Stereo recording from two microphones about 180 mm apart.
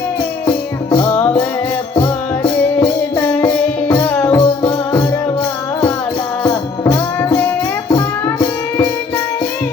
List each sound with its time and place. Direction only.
0.4 s music: 15° left (ahead or behind)
2.8 s music: 15° left (ahead or behind)
6.4 s music: 15° left (ahead or behind)